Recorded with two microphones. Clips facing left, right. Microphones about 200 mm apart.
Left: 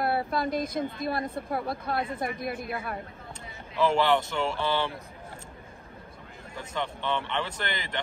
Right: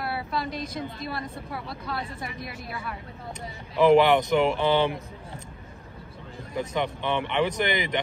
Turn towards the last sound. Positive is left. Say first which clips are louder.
# right 8 dB
turn(degrees=-15)  # may be behind; listen again after turning